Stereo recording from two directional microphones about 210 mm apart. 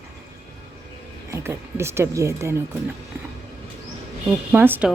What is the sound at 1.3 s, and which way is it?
Speech, 10° right (ahead or behind).